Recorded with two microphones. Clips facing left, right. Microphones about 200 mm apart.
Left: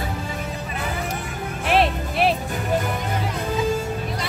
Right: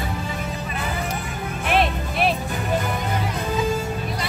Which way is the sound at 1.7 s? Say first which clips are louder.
Left 2 dB; 30° left (ahead or behind).